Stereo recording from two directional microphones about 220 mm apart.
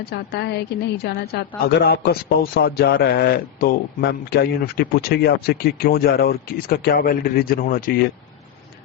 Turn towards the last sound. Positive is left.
turn(degrees=40)  # may be behind; listen again after turning